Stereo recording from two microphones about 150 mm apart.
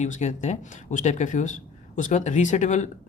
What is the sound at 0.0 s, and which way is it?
A woman's voice, 50° left (ahead or behind).